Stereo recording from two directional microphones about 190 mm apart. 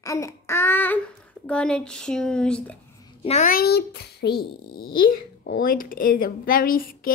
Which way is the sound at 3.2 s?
35° left (ahead or behind).